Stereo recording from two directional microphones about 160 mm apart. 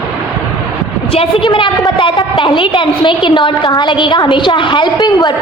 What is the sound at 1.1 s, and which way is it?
A woman's voice, 35° left (ahead or behind).